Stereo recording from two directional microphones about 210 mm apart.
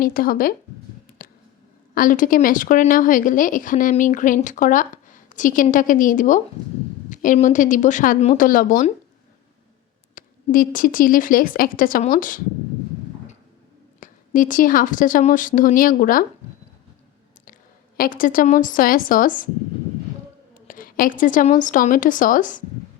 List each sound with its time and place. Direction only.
0.0 s speech: 45° left (ahead or behind)
1.2 s a sound: 45° left (ahead or behind)
2.0 s speech: 40° left (ahead or behind)
10.2 s speech: 40° left (ahead or behind)
14.0 s speech: 40° left (ahead or behind)
17.9 s speech: 40° left (ahead or behind)
20.5 s a woman's voice: 40° left (ahead or behind)